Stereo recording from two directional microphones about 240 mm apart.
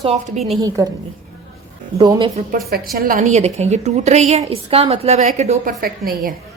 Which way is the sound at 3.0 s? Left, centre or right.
Right.